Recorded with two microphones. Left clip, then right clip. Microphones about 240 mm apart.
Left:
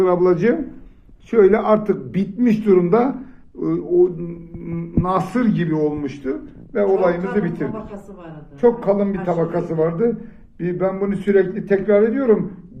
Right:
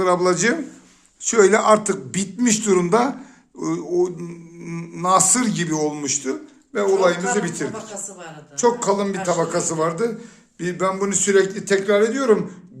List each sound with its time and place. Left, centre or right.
0.0 s a man's voice: right